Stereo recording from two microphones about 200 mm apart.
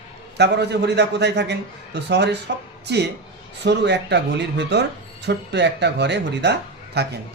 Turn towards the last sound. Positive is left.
turn(degrees=-55)  # may be behind; listen again after turning